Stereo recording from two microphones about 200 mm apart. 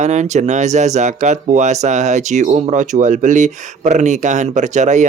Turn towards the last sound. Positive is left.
turn(degrees=-35)  # may be behind; listen again after turning